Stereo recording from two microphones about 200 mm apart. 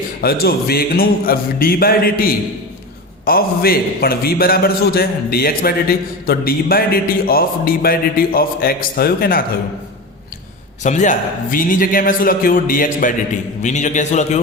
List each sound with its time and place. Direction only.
0.2 s a man's voice: 50° left (ahead or behind)
10.8 s a man's voice: 35° left (ahead or behind)